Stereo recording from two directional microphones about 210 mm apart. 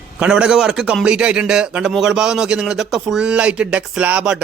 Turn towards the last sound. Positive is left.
turn(degrees=-5)  # may be behind; listen again after turning